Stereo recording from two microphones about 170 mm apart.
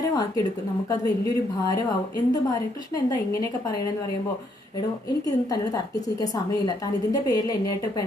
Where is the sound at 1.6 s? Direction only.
20° left (ahead or behind).